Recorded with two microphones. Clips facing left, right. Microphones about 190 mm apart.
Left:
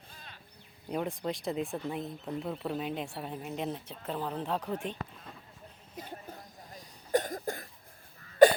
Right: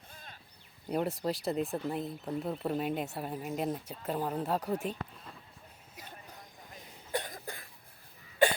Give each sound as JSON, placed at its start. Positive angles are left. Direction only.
{"t": 0.9, "sound": "speech", "side_deg": -5}
{"t": 7.1, "sound": "cough", "side_deg": 45}